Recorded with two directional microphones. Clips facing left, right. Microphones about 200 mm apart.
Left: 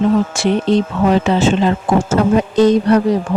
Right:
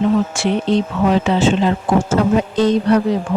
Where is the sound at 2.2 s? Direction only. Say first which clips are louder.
Left 6 dB; 50° left (ahead or behind).